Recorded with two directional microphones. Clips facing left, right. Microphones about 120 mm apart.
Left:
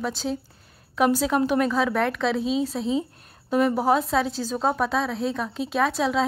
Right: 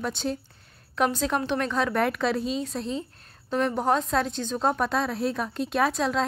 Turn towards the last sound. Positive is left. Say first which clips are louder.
# left 2 dB
turn(degrees=0)  # may be behind; listen again after turning